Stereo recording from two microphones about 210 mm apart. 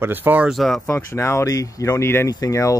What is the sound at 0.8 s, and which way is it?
Speech, 15° left (ahead or behind).